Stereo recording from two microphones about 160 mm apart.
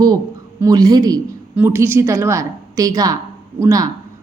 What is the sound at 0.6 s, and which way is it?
A woman's voice, 25° right (ahead or behind).